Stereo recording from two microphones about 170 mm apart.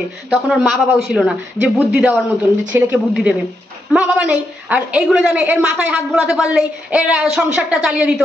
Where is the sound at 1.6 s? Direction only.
20° right (ahead or behind).